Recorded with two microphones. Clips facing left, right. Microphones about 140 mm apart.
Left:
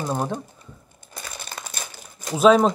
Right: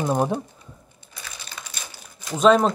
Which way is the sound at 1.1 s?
45° left (ahead or behind).